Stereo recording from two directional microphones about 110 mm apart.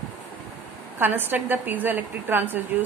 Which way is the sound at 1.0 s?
20° right (ahead or behind).